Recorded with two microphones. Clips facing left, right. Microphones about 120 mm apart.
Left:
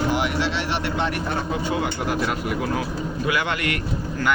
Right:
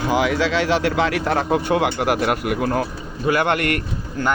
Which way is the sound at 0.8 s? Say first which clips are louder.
Right 5 dB; 90° right.